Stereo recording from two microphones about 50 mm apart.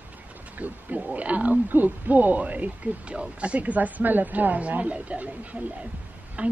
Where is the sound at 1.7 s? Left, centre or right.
Right.